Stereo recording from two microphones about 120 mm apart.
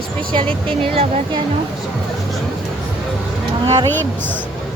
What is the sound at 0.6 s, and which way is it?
Speech, 50° right (ahead or behind).